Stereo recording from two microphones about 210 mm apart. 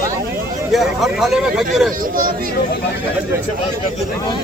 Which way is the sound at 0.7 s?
Centre (ahead or behind).